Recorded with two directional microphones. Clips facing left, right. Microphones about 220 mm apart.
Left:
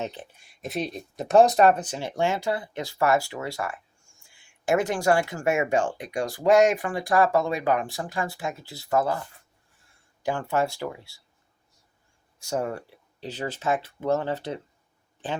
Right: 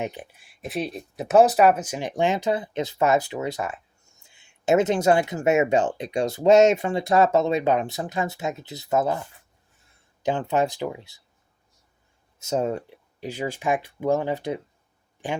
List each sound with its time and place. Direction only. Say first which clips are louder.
0.0 s speech: right 2 dB; 15° right (ahead or behind)
0.4 s speech: right 1 dB; centre (ahead or behind); by 9.2 s 20° right (ahead or behind)
10.2 s speech: right 3 dB; 20° right (ahead or behind)
12.4 s speech: right 4 dB; 20° right (ahead or behind)